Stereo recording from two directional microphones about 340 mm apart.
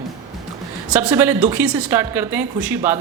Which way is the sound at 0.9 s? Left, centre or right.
Centre.